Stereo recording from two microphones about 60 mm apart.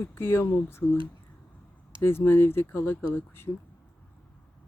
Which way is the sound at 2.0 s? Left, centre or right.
Left.